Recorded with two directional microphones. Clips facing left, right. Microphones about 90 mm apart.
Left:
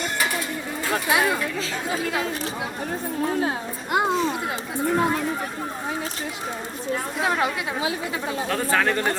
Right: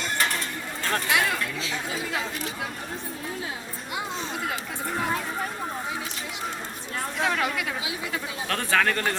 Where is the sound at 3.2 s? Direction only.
55° left (ahead or behind).